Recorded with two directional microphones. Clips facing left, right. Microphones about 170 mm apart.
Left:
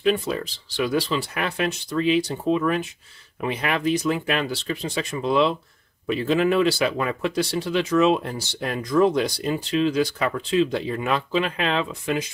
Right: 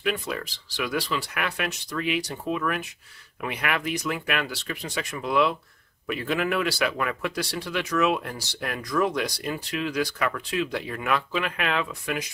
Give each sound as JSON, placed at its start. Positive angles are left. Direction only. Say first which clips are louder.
{"t": 0.0, "sound": "speech", "louder": "left 6 dB", "side_deg": 30}